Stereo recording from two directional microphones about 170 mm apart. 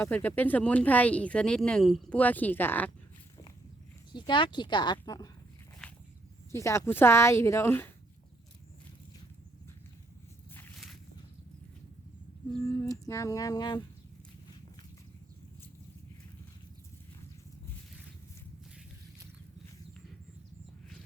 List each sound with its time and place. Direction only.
0.0 s speech: 10° left (ahead or behind)
4.1 s speech: 25° left (ahead or behind)
6.5 s speech: 15° left (ahead or behind)
12.6 s speech: 15° left (ahead or behind)